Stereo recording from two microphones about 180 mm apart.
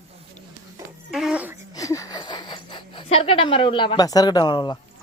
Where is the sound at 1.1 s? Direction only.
5° right (ahead or behind).